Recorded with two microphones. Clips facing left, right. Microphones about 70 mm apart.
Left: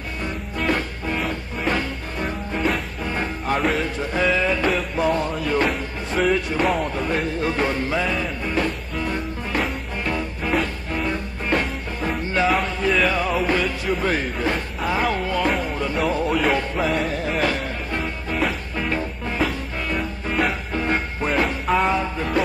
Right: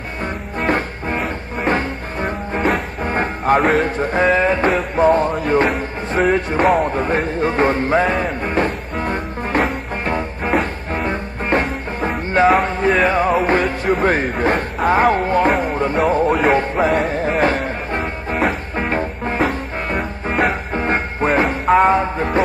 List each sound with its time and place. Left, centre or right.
0.2 s music: right
2.6 s music: right
4.0 s speech: right
5.7 s music: right
6.9 s music: right
13.0 s speech: right
16.5 s music: right
17.1 s music: right
20.7 s music: right
21.8 s music: right